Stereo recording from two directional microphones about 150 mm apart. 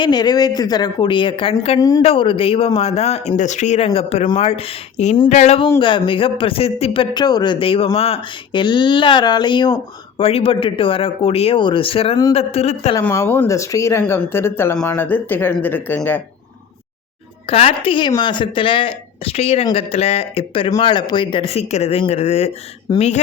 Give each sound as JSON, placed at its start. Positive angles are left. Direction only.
{"t": 0.0, "sound": "a woman's voice", "side_deg": 30}
{"t": 5.8, "sound": "speech", "side_deg": 35}
{"t": 13.0, "sound": "a woman's voice", "side_deg": 20}
{"t": 14.0, "sound": "speech", "side_deg": 10}
{"t": 17.4, "sound": "speech", "side_deg": 40}